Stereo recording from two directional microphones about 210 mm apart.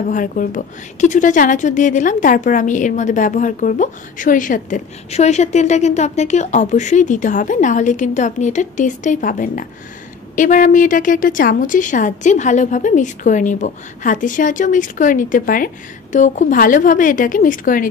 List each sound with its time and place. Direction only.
0.1 s speech: 40° left (ahead or behind)